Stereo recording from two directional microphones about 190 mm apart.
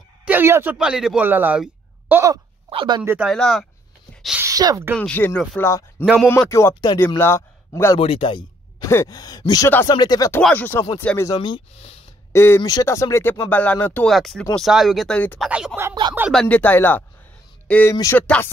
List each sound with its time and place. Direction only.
0.2 s a man's voice: 10° right (ahead or behind)
2.7 s a sound: 25° right (ahead or behind)
3.0 s speech: 5° right (ahead or behind)
4.2 s a sound: 5° right (ahead or behind)
4.5 s speech: 20° right (ahead or behind)
4.9 s a man's voice: 5° left (ahead or behind)
8.0 s speech: 30° left (ahead or behind); by 11.3 s 10° left (ahead or behind)
11.3 s speech: 30° left (ahead or behind)
12.3 s speech: 15° left (ahead or behind)
15.5 s speech: 10° right (ahead or behind)
16.2 s speech: centre (ahead or behind); by 18.2 s 15° left (ahead or behind)